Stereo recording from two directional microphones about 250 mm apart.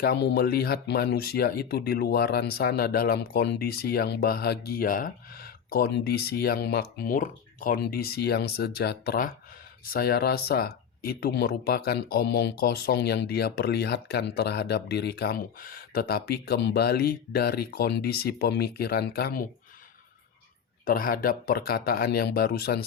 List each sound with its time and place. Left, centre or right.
0.0 s speech: left
20.8 s speech: left